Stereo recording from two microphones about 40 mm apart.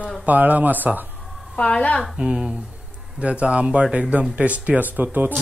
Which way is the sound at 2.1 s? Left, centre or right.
Right.